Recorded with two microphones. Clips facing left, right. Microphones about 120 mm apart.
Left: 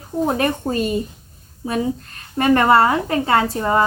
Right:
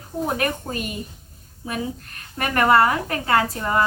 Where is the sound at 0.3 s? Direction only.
25° left (ahead or behind).